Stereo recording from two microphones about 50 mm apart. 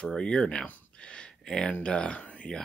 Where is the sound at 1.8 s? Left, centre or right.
Centre.